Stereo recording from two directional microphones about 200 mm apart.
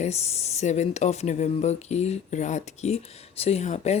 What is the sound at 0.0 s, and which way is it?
Speech, 30° left (ahead or behind).